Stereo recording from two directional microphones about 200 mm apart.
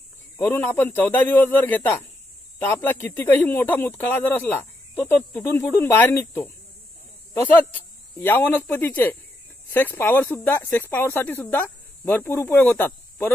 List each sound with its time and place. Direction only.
0.4 s speech: 10° left (ahead or behind)